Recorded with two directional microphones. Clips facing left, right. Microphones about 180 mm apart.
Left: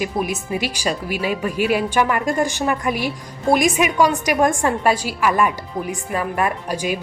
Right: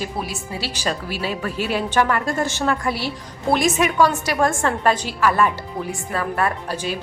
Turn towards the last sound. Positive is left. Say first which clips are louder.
# left 3 dB
turn(degrees=10)  # may be behind; listen again after turning